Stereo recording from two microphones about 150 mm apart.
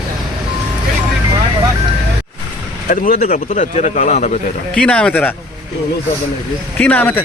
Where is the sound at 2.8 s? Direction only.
70° left (ahead or behind).